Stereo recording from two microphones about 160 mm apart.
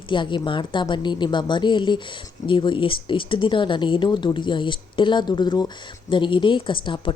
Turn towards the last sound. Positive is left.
turn(degrees=30)  # may be behind; listen again after turning